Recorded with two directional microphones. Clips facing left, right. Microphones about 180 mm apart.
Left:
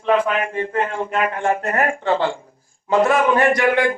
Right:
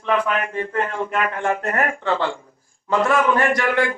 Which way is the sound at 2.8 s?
20° left (ahead or behind).